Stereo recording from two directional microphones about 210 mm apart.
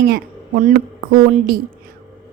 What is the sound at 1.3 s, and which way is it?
Speech, 45° right (ahead or behind).